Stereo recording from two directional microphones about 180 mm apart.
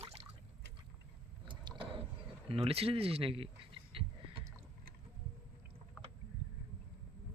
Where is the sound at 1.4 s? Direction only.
30° right (ahead or behind).